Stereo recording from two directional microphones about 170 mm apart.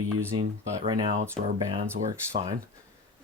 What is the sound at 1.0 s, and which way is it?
Speech, 45° right (ahead or behind).